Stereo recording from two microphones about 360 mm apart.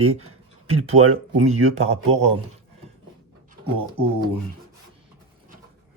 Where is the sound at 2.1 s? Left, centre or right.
Centre.